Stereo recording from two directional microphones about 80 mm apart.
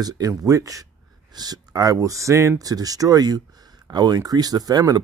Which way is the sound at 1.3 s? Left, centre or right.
Right.